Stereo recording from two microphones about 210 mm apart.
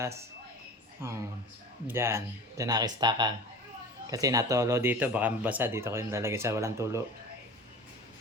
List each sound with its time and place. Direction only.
1.0 s speech: 10° right (ahead or behind)